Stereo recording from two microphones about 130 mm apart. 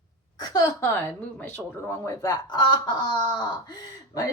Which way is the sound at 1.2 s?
15° left (ahead or behind).